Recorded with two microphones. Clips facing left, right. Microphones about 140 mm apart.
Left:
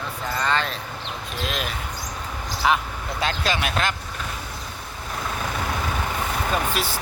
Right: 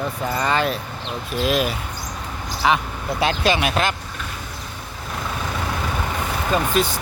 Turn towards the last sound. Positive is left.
turn(degrees=5)  # may be behind; listen again after turning